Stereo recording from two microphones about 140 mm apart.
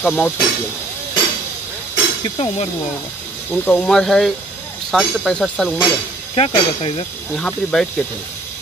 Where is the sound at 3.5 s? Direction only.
5° left (ahead or behind).